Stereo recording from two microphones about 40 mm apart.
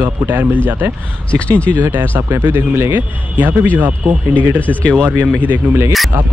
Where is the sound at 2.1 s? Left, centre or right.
Right.